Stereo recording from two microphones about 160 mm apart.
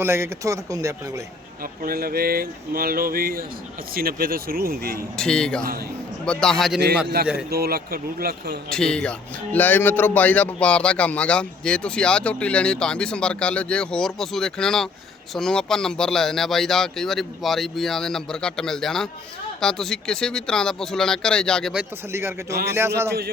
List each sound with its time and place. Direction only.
0.0 s speech: 15° right (ahead or behind)
1.6 s speech: 65° right (ahead or behind)
5.1 s speech: 5° left (ahead or behind)
7.2 s speech: 75° right (ahead or behind)
8.7 s speech: 5° left (ahead or behind)
22.1 s speech: 15° right (ahead or behind)